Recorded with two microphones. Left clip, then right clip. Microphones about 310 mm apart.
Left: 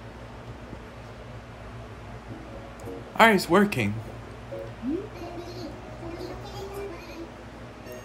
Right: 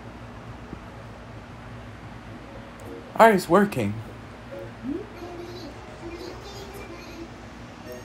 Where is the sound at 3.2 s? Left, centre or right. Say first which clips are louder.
Right 2 dB; centre.